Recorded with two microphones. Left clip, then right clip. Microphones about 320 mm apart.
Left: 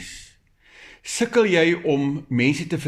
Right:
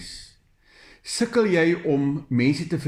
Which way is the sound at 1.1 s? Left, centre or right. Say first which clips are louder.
Left 3 dB; left.